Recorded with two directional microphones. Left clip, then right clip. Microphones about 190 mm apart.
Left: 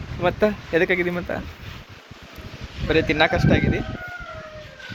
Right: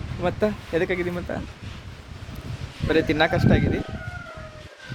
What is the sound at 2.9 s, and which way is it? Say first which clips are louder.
Speech: left 2 dB; 35° right (ahead or behind).